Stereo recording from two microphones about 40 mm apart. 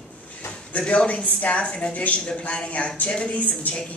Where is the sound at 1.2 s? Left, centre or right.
Left.